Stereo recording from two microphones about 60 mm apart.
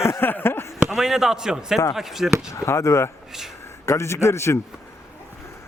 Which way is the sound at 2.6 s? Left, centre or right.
Left.